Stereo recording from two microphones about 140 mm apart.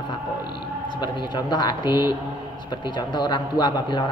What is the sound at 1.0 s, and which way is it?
A woman's voice, 30° left (ahead or behind).